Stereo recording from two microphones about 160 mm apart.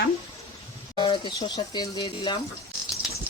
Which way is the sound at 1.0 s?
30° left (ahead or behind).